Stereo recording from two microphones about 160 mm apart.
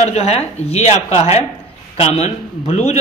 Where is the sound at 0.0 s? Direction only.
40° left (ahead or behind).